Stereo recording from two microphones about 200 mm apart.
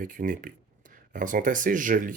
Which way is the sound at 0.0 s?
45° right (ahead or behind).